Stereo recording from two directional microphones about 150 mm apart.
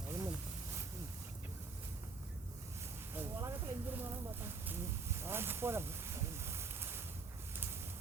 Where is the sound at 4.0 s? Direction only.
15° right (ahead or behind).